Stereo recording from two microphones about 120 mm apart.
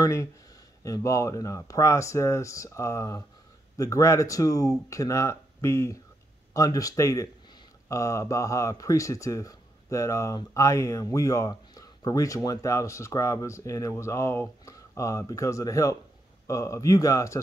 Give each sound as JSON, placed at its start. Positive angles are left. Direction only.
{"t": 0.0, "sound": "speech", "side_deg": 25}